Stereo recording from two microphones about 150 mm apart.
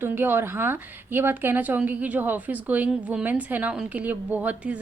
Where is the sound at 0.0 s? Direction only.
15° right (ahead or behind).